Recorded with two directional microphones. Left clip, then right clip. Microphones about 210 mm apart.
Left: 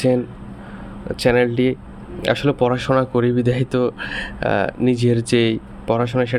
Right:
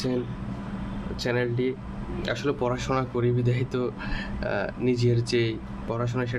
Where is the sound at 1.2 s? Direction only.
40° left (ahead or behind).